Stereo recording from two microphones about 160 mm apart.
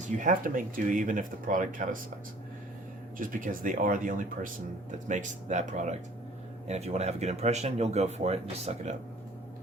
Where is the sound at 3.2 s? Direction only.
55° right (ahead or behind).